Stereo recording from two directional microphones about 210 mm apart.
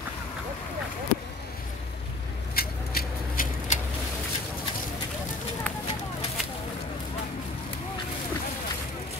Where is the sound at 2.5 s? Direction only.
45° left (ahead or behind).